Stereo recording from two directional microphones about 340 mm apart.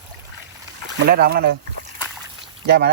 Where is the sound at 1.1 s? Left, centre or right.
Right.